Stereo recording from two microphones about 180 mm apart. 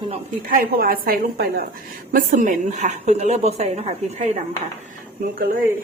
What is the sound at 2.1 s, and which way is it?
A woman's voice, 45° right (ahead or behind).